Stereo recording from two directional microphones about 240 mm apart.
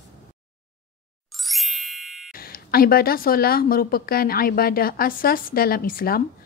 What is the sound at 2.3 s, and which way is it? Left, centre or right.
A woman's voice, left.